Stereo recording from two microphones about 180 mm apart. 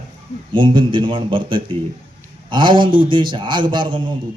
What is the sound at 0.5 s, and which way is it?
A man's voice, 25° right (ahead or behind).